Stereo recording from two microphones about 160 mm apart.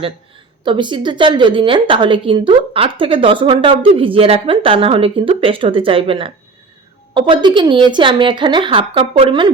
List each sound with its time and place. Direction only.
0.6 s a woman's voice: 30° right (ahead or behind)